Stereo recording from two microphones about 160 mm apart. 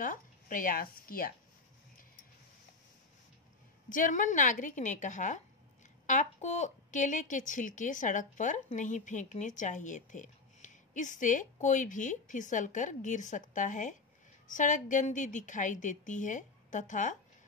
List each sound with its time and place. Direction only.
0.0 s speech: 55° left (ahead or behind)
3.9 s a woman's voice: 55° left (ahead or behind)